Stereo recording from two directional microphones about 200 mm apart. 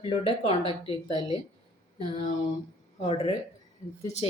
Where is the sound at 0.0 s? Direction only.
25° left (ahead or behind).